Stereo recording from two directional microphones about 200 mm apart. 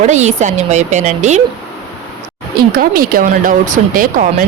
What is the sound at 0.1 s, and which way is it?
Speech, 35° right (ahead or behind).